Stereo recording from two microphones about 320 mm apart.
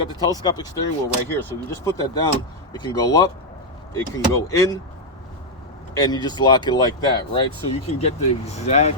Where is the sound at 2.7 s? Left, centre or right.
Centre.